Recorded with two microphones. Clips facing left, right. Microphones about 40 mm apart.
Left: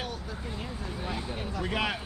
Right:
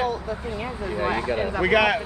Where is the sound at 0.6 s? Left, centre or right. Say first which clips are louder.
Right 13 dB; right.